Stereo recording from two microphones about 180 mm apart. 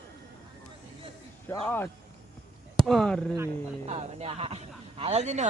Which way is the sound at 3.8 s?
35° right (ahead or behind).